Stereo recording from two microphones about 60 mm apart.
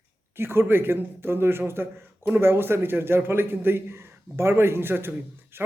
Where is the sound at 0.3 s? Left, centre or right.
Right.